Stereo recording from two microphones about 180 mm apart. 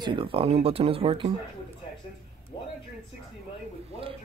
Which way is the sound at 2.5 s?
25° left (ahead or behind).